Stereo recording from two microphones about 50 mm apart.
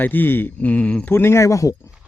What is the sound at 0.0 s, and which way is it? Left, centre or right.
Speech, left.